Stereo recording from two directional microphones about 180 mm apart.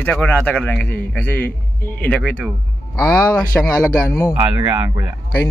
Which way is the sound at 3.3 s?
15° left (ahead or behind).